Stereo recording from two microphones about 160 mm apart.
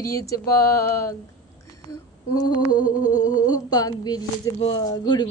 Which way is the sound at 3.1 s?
25° left (ahead or behind).